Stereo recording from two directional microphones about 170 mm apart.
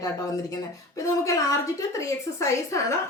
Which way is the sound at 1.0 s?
20° left (ahead or behind).